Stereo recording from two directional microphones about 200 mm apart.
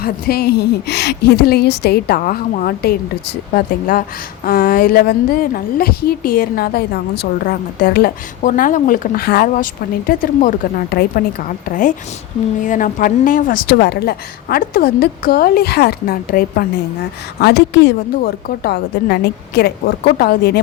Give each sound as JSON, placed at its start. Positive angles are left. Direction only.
{"t": 0.0, "sound": "a woman's voice", "side_deg": 50}